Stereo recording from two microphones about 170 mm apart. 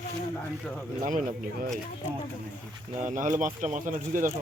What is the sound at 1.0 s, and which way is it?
Speech, 50° right (ahead or behind).